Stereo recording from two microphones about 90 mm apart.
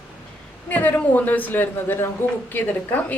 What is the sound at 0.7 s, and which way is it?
A woman's voice, 20° left (ahead or behind).